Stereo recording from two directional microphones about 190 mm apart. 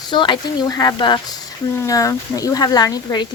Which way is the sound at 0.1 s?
25° left (ahead or behind).